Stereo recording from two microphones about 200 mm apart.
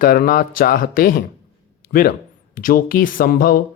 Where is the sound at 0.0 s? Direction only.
45° left (ahead or behind).